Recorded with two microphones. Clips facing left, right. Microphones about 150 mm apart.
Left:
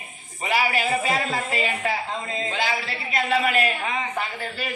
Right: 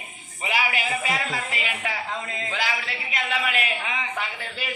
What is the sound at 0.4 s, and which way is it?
A man's voice, 40° left (ahead or behind).